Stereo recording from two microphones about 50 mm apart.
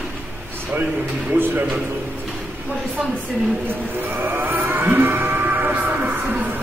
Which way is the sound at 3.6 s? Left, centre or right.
Right.